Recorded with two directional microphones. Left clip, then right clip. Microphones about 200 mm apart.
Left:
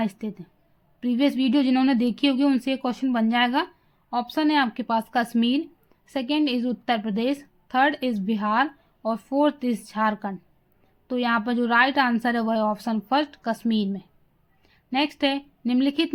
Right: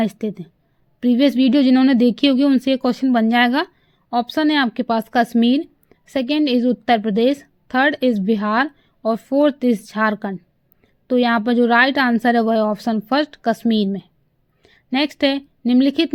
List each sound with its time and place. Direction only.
0.0 s a woman's voice: 35° right (ahead or behind)